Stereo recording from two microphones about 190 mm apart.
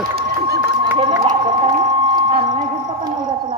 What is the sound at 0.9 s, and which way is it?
Crowd, 30° right (ahead or behind).